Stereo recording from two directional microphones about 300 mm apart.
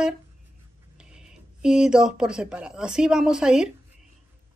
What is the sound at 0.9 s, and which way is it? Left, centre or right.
Speech, centre.